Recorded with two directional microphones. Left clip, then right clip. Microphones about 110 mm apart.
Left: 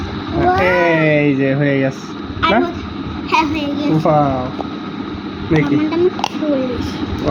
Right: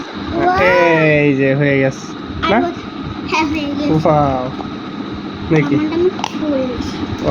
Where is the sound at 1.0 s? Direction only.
5° right (ahead or behind).